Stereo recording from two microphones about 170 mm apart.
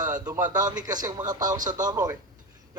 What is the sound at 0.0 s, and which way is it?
A man's voice, 20° right (ahead or behind).